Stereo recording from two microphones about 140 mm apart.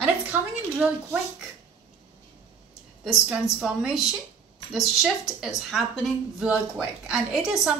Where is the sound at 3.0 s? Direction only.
Centre (ahead or behind).